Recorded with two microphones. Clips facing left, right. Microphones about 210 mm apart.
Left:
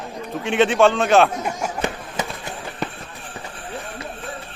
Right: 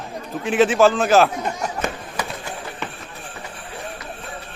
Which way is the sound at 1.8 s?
25° left (ahead or behind).